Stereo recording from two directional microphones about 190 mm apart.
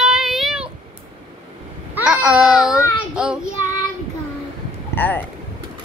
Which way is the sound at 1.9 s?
5° right (ahead or behind).